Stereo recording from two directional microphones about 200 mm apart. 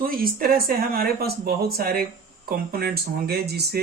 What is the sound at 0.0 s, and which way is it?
Speech, 45° right (ahead or behind).